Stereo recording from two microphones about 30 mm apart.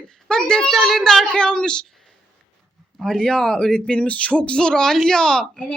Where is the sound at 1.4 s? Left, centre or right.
Left.